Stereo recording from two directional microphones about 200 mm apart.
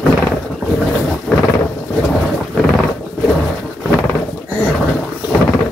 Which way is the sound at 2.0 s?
Centre (ahead or behind).